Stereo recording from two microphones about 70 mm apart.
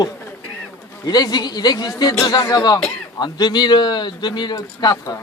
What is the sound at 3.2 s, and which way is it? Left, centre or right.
A man's voice, left.